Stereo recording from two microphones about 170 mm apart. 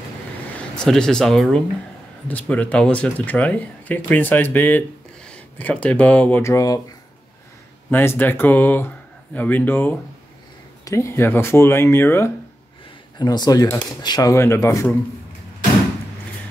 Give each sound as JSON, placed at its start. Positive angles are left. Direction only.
{"t": 0.7, "sound": "speech", "side_deg": 5}
{"t": 7.9, "sound": "speech", "side_deg": 10}